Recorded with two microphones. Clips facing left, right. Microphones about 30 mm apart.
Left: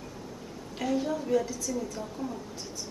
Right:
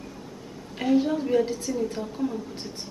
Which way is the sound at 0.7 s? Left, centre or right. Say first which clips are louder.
Right 7 dB; right.